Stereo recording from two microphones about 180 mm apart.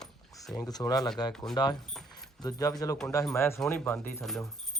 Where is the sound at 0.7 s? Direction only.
20° left (ahead or behind).